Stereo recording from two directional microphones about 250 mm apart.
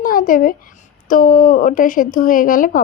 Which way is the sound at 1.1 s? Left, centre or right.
Left.